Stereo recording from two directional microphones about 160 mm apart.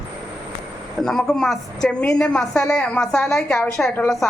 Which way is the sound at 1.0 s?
Centre (ahead or behind).